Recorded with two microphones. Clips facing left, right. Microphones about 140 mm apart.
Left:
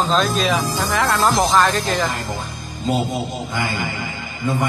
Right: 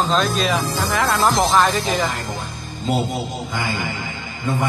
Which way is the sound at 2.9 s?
20° left (ahead or behind).